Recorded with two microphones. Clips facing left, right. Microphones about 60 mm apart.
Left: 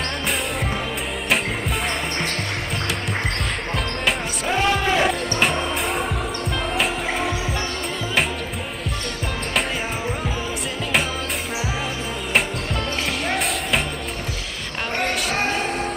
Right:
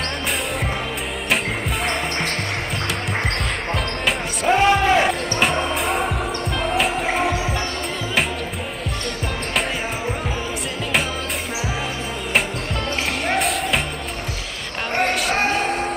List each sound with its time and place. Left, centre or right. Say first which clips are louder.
4.5 s basketball bounce: right 5 dB; centre
5.0 s music: right 1 dB; centre
13.4 s music: right 2 dB; centre